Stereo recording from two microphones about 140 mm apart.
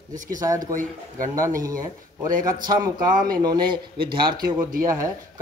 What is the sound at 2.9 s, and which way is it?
Speech, 90° right.